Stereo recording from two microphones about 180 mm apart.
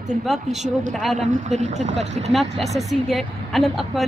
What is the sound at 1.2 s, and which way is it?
Speech, 40° right (ahead or behind).